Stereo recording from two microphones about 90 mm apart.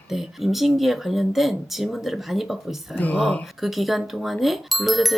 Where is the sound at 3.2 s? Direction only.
5° left (ahead or behind).